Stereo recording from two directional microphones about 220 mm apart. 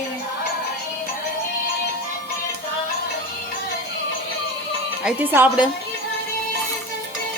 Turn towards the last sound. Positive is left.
turn(degrees=-10)  # may be behind; listen again after turning